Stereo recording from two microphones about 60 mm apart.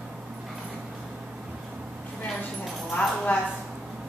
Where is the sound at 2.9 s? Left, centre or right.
Left.